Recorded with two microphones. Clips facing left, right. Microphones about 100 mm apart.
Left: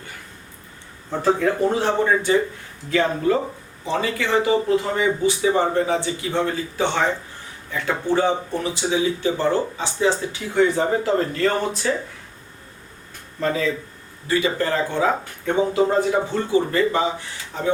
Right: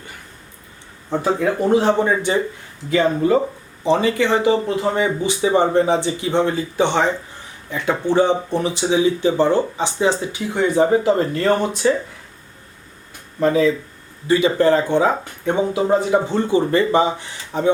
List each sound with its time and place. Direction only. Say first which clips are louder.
1.2 s speech: left 1 dB; 15° right (ahead or behind)
13.4 s speech: right 6 dB; 15° right (ahead or behind)